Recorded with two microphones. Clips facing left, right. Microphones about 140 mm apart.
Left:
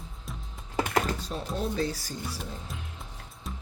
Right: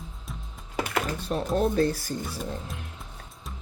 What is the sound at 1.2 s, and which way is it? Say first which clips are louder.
Speech: right 7 dB; 60° right (ahead or behind).